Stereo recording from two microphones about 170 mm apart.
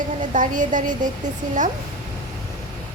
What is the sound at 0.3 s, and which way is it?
Speech, 50° right (ahead or behind).